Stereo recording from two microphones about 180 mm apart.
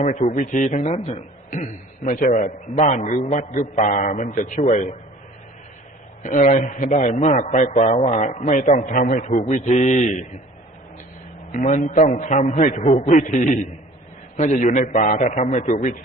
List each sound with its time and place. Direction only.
0.0 s a man's voice: 35° left (ahead or behind)
6.2 s a man's voice: 45° left (ahead or behind)
11.5 s a man's voice: 45° left (ahead or behind)
13.1 s a man's voice: 45° left (ahead or behind)